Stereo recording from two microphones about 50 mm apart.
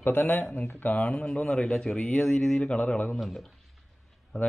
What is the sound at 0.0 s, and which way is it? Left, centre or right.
A man's voice, left.